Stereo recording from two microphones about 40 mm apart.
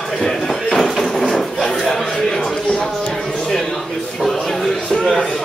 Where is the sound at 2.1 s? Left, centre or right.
Centre.